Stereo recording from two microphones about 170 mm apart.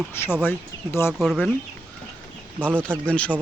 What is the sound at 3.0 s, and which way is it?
Speech, 5° left (ahead or behind).